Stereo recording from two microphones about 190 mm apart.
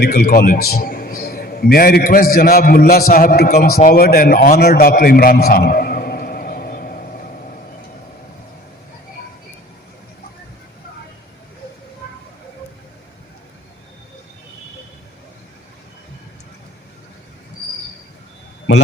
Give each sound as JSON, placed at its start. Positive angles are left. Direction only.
{"t": 0.0, "sound": "a man's voice", "side_deg": 50}